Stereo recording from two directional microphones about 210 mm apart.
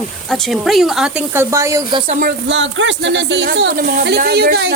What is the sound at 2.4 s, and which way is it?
Speech, 60° right (ahead or behind).